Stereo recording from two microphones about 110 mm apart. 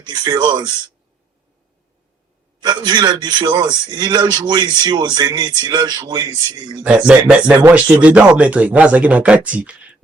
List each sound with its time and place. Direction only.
0.0 s a man's voice: 40° right (ahead or behind)
2.6 s a man's voice: 40° right (ahead or behind)
6.8 s speech: 10° right (ahead or behind)